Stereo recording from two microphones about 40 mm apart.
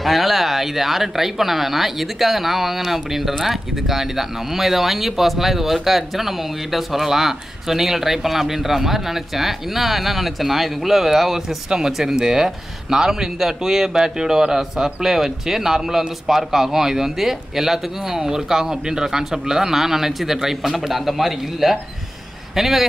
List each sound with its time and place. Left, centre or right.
0.0 s a man's voice: centre